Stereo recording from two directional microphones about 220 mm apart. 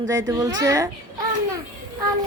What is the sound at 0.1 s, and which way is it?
Speech, 15° right (ahead or behind).